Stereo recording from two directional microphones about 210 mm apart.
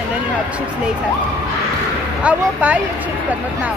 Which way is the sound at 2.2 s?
5° right (ahead or behind).